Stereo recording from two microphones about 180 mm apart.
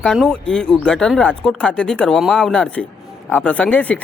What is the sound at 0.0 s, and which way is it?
Speech, 5° left (ahead or behind).